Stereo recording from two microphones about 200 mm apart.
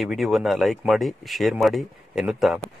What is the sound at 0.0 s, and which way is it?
Speech, centre (ahead or behind).